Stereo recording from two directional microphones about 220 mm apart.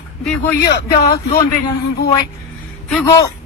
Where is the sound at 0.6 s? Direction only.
50° left (ahead or behind).